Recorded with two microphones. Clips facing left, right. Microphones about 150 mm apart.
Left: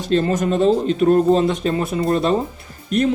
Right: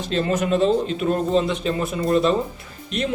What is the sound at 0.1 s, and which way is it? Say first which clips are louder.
Speech: left 3 dB; 40° left (ahead or behind).